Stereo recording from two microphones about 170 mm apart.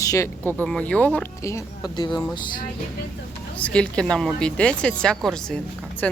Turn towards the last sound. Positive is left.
turn(degrees=10)  # may be behind; listen again after turning